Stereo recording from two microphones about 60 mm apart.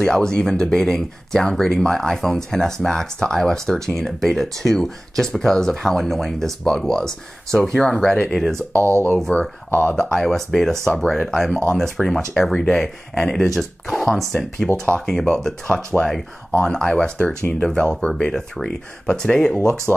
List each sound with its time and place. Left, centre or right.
0.0 s speech: centre
8.5 s speech: right
9.2 s speech: centre
10.1 s speech: centre